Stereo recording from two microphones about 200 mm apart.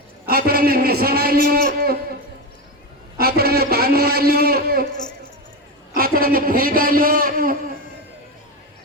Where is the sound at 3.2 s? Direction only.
50° right (ahead or behind).